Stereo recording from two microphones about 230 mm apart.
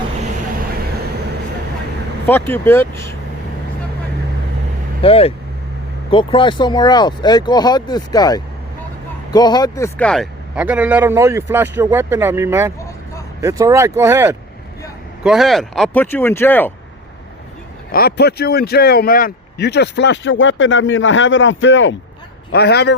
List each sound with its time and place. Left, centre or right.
2.2 s speech: centre
5.0 s a man's voice: left; by 16.7 s centre
17.9 s speech: left